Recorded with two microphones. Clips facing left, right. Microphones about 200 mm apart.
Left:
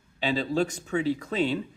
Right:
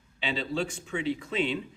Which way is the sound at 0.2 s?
40° left (ahead or behind).